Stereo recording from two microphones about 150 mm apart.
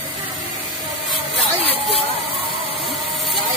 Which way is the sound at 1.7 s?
40° left (ahead or behind).